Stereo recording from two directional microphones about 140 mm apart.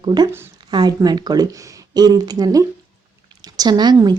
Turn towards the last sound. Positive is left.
turn(degrees=-30)  # may be behind; listen again after turning